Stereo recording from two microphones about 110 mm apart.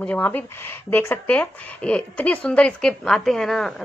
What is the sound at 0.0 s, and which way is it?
Speech, 15° left (ahead or behind).